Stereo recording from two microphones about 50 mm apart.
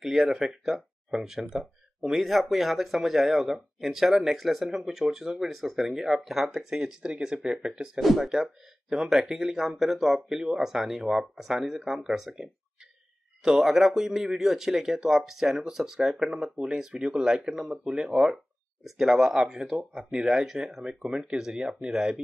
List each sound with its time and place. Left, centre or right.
0.0 s speech: centre
8.0 s speech: centre
17.8 s speech: centre